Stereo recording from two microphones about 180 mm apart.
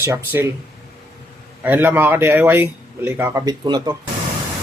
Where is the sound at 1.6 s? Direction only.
10° right (ahead or behind).